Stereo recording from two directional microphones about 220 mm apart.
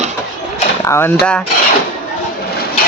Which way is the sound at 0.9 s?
10° left (ahead or behind).